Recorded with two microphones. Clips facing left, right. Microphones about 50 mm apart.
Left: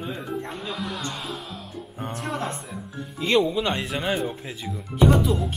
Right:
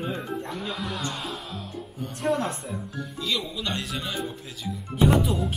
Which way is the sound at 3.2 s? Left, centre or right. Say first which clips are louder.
Left 10 dB; left.